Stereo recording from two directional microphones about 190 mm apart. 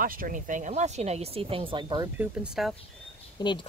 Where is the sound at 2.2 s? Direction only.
5° right (ahead or behind).